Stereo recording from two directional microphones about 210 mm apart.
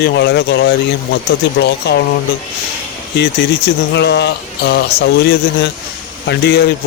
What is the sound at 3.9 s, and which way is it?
Speech, 55° left (ahead or behind).